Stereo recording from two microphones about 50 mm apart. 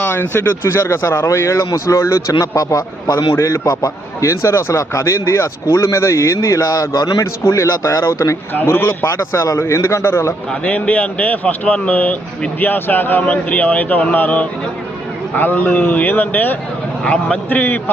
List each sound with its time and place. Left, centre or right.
0.0 s speech: left
1.3 s speech: left
3.3 s speech: left
8.6 s speech: left
9.0 s a man's voice: left
10.7 s speech: left
17.1 s a man's voice: left
17.5 s speech: left